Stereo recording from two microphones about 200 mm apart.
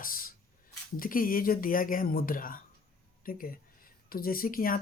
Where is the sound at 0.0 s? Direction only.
45° left (ahead or behind).